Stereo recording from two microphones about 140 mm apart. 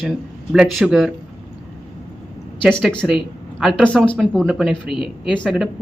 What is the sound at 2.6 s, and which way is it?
Speech, centre (ahead or behind).